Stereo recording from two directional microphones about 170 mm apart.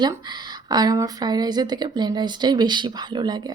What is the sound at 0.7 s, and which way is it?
A woman's voice, 20° right (ahead or behind).